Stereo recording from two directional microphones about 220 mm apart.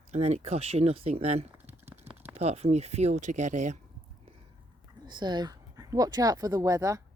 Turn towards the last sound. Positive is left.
turn(degrees=-15)  # may be behind; listen again after turning